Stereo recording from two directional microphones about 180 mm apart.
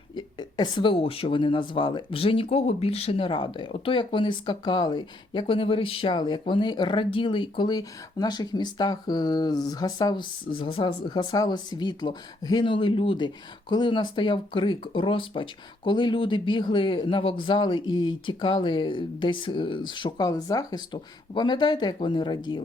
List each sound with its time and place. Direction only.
0.2 s speech: 25° left (ahead or behind)